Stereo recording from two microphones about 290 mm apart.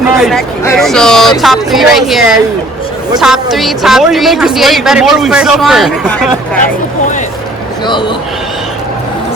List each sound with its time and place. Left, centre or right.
0.2 s a man's voice: centre
7.9 s a man's voice: centre